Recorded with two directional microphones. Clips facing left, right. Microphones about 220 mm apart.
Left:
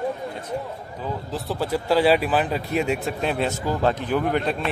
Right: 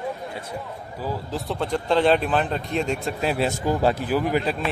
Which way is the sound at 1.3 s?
5° left (ahead or behind).